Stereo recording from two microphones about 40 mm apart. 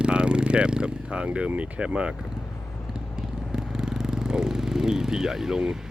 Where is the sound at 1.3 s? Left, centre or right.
Right.